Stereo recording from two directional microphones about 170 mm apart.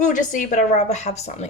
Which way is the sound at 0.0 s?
50° left (ahead or behind).